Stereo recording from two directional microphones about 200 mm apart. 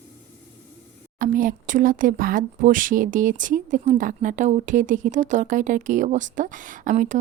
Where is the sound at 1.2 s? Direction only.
45° right (ahead or behind).